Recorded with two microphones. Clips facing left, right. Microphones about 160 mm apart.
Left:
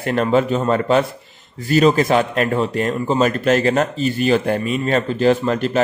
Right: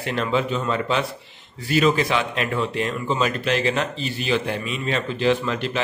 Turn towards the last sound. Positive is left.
turn(degrees=45)  # may be behind; listen again after turning